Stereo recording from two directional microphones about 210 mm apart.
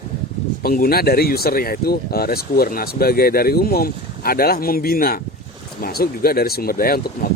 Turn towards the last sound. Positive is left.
turn(degrees=45)  # may be behind; listen again after turning